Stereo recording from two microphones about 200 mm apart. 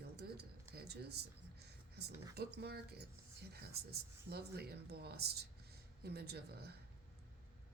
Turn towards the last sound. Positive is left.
turn(degrees=-55)  # may be behind; listen again after turning